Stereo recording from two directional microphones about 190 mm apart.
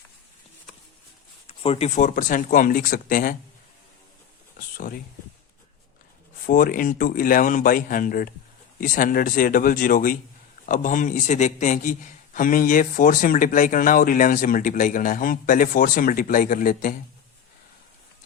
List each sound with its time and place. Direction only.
1.5 s a man's voice: 30° left (ahead or behind); by 3.3 s 50° left (ahead or behind)
6.4 s a man's voice: 45° left (ahead or behind)